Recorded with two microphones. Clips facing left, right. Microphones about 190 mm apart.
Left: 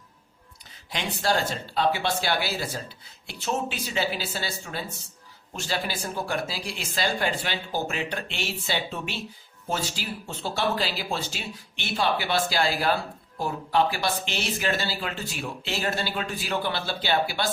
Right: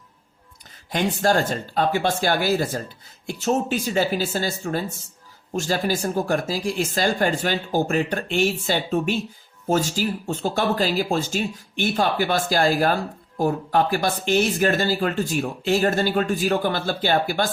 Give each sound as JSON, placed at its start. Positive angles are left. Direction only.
{"t": 0.9, "sound": "speech", "side_deg": -50}